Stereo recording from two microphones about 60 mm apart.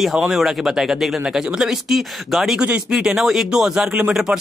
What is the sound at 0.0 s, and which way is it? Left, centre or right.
Speech, centre.